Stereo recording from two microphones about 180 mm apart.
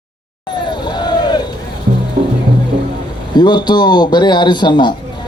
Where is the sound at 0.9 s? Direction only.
25° left (ahead or behind).